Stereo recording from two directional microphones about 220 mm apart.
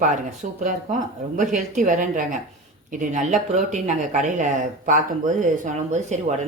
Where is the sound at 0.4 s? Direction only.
35° right (ahead or behind).